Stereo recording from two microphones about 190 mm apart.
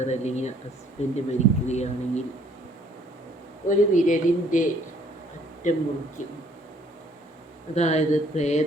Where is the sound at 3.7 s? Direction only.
40° left (ahead or behind).